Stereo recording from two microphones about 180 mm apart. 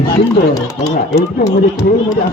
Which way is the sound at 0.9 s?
60° left (ahead or behind).